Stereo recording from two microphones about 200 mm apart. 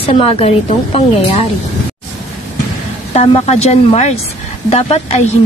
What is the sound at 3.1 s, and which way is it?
A woman's voice, 30° left (ahead or behind).